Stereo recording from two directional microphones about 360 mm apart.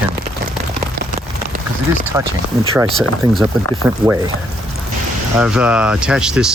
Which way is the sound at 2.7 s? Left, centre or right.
Centre.